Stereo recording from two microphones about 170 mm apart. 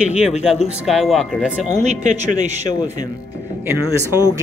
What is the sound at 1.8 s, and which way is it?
Speech, 45° right (ahead or behind).